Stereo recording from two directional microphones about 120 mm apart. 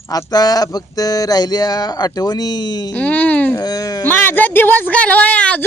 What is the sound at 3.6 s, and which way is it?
Speech, 30° left (ahead or behind).